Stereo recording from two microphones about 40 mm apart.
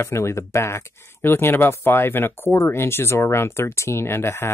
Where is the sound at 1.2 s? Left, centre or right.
Left.